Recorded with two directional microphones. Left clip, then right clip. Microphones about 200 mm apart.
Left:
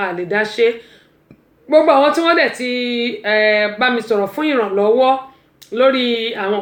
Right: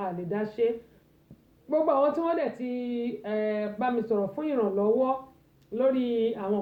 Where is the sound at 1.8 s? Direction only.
25° left (ahead or behind).